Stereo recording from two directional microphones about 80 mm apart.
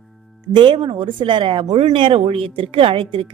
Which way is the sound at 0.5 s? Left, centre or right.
Right.